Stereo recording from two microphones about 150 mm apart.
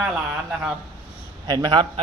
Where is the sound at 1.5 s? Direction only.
30° right (ahead or behind).